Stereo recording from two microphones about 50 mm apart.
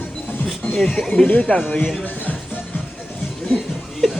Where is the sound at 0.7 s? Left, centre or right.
Centre.